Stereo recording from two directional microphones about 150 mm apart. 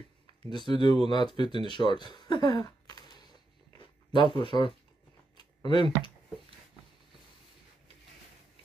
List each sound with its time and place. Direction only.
0.5 s speech: 30° left (ahead or behind)
3.7 s a sound: 30° left (ahead or behind)
4.4 s speech: 35° left (ahead or behind)